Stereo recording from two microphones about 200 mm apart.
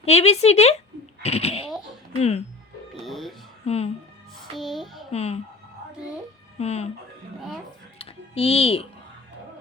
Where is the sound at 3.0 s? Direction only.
Centre (ahead or behind).